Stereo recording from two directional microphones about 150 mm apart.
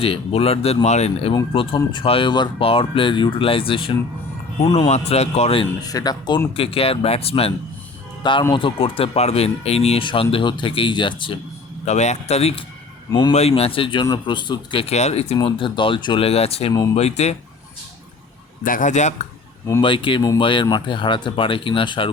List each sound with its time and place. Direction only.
0.0 s speech: 40° left (ahead or behind)
1.5 s speech: 35° left (ahead or behind)
5.8 s speech: 25° left (ahead or behind)
6.6 s speech: 40° left (ahead or behind)
11.9 s speech: 50° left (ahead or behind)
13.1 s speech: 30° left (ahead or behind); by 17.3 s 45° left (ahead or behind)
18.6 s speech: 60° left (ahead or behind)
19.8 s speech: 35° left (ahead or behind)